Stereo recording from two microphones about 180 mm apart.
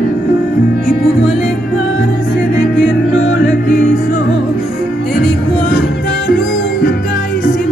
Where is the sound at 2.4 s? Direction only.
70° left (ahead or behind).